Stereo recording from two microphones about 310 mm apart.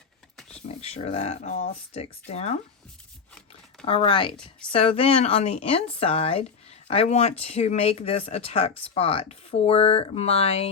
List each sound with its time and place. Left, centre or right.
0.3 s a sound: centre
0.8 s speech: centre
3.8 s speech: centre